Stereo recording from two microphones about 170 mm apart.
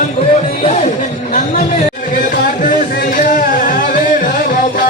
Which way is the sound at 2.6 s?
55° left (ahead or behind).